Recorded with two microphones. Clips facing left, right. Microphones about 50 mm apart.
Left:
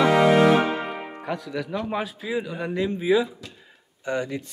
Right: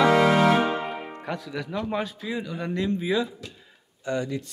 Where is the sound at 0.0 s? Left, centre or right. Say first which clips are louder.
Left 2 dB; centre.